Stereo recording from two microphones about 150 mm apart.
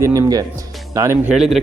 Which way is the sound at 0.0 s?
20° right (ahead or behind).